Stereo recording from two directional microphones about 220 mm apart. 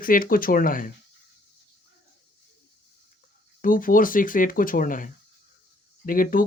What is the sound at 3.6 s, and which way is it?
Speech, 40° left (ahead or behind).